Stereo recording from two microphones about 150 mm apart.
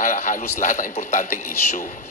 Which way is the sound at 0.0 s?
60° left (ahead or behind).